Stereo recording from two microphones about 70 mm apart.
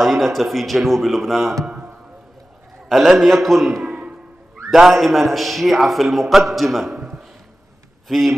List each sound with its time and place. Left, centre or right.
0.0 s a man's voice: centre
1.7 s music: centre
2.9 s a man's voice: centre
4.7 s a man's voice: centre
7.0 s a sound: centre
8.1 s a man's voice: centre